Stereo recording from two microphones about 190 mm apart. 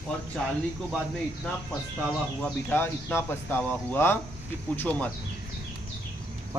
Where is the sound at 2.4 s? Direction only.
10° left (ahead or behind).